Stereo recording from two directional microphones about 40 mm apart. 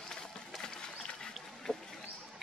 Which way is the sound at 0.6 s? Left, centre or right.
Left.